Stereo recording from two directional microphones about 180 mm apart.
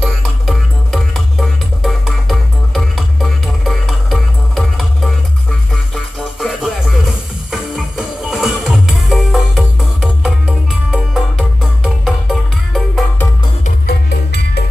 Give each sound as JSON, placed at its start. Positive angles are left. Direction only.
{"t": 0.0, "sound": "music", "side_deg": 0}
{"t": 6.4, "sound": "music", "side_deg": 0}
{"t": 13.8, "sound": "music", "side_deg": 65}